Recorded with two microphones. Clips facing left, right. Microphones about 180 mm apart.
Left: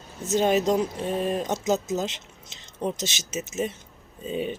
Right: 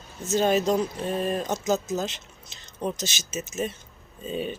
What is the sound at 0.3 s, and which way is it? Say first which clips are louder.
Speech: left 1 dB; 20° left (ahead or behind).